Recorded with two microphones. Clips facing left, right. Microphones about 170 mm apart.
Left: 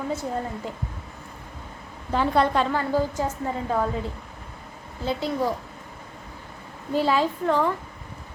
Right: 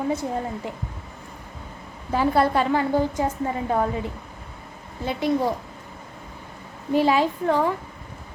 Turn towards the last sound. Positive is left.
turn(degrees=-10)  # may be behind; listen again after turning